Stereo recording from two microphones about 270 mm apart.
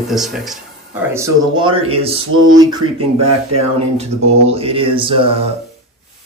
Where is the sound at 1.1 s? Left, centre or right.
Centre.